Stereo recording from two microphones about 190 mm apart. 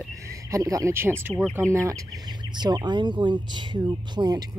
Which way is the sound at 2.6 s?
20° right (ahead or behind).